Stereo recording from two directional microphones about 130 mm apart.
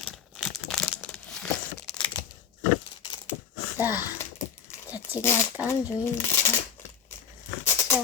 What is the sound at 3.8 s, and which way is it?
Speech, 15° right (ahead or behind).